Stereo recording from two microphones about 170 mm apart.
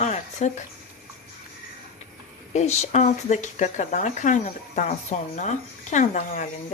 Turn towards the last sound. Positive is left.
turn(degrees=45)  # may be behind; listen again after turning